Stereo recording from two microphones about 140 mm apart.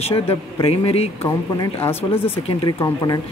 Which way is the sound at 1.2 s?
15° left (ahead or behind).